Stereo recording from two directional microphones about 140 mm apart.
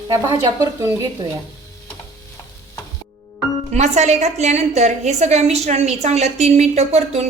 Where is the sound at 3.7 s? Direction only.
55° right (ahead or behind).